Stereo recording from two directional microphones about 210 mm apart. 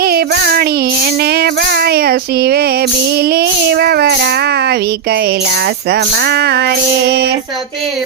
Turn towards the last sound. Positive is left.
turn(degrees=-50)  # may be behind; listen again after turning